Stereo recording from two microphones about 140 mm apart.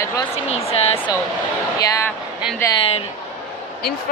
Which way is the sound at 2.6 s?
20° left (ahead or behind).